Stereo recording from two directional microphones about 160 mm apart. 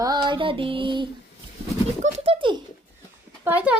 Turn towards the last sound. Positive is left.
turn(degrees=-10)  # may be behind; listen again after turning